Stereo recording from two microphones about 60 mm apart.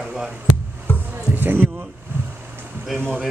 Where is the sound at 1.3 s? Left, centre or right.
Right.